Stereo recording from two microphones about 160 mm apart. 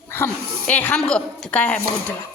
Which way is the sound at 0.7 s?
10° left (ahead or behind).